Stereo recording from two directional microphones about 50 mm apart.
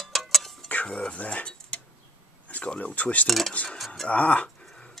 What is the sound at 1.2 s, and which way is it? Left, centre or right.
Dishes, left.